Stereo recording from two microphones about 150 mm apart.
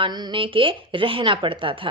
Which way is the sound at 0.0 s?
30° right (ahead or behind).